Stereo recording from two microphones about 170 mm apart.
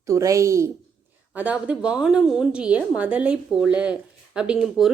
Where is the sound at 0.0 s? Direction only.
20° right (ahead or behind).